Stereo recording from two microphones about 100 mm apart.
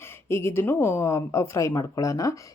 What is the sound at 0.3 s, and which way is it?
Speech, 25° left (ahead or behind).